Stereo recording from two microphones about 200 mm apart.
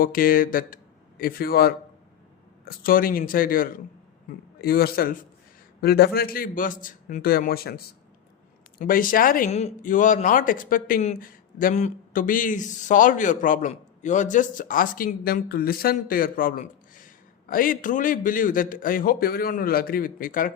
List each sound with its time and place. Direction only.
0.0 s a man's voice: 45° left (ahead or behind)